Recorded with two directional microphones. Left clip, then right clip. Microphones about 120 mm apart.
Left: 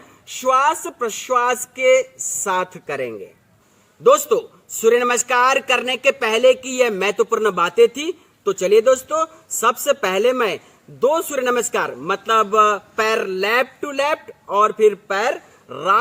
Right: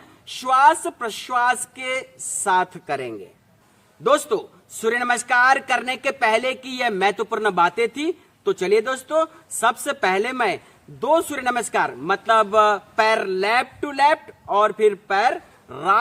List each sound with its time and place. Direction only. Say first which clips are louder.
0.4 s a man's voice: right 1 dB; 15° right (ahead or behind)